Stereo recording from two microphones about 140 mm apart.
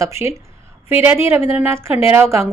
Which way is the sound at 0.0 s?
20° right (ahead or behind).